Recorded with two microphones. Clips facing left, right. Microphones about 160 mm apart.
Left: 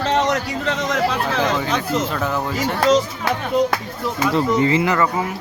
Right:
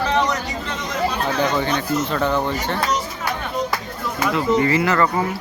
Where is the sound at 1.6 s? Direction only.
90° left.